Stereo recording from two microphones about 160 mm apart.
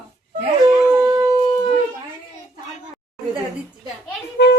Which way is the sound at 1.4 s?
30° left (ahead or behind).